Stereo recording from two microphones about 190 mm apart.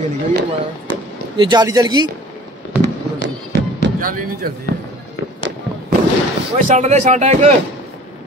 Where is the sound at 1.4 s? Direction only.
20° right (ahead or behind).